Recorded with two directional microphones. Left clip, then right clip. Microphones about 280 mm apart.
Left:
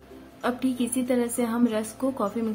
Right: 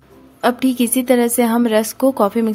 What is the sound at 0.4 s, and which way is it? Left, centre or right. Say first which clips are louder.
A woman's voice: right 11 dB; right.